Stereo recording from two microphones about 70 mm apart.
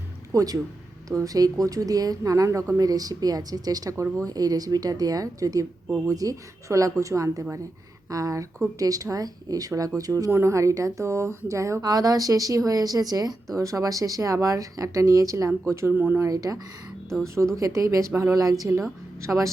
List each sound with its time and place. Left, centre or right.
0.3 s speech: right
2.7 s speech: right
3.9 s speech: right
4.3 s speech: right
10.3 s speech: right
11.8 s speech: right
15.9 s speech: right
16.2 s speech: right
17.6 s speech: right